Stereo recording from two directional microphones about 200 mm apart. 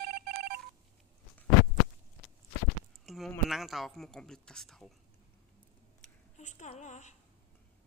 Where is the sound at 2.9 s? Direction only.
Centre (ahead or behind).